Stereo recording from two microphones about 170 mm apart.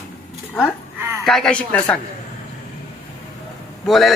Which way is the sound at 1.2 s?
5° left (ahead or behind).